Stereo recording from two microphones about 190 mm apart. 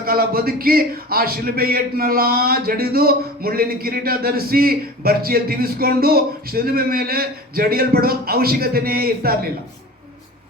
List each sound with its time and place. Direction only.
0.0 s speech: 50° right (ahead or behind)